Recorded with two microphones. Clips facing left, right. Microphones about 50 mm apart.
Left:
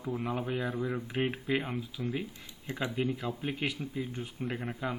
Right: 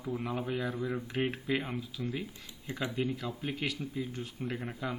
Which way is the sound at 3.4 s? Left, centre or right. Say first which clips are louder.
Left 1 dB; centre.